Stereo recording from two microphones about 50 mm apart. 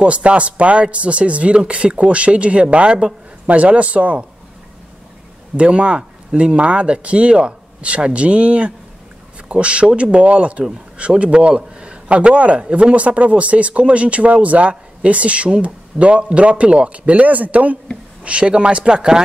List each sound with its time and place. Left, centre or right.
0.0 s speech: right
5.6 s speech: right